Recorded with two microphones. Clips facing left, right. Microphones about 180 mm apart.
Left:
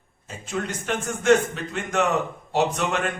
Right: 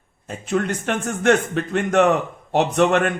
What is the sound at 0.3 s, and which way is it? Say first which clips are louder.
Speech: right 7 dB; 60° right (ahead or behind).